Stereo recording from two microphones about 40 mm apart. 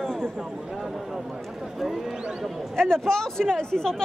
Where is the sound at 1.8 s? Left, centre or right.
Centre.